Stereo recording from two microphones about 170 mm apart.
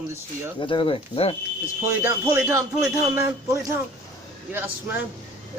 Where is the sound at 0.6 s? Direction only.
30° left (ahead or behind).